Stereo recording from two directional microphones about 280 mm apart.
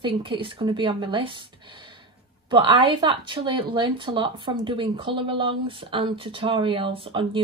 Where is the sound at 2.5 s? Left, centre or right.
Centre.